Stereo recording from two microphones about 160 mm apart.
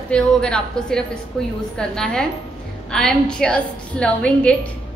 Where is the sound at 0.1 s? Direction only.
5° left (ahead or behind).